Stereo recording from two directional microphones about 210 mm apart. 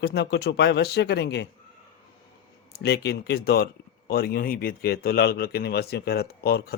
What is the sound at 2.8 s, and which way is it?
Speech, 55° left (ahead or behind).